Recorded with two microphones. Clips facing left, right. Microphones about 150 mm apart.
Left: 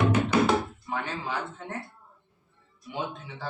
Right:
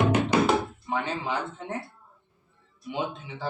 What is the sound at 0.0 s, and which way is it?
Music, 20° right (ahead or behind).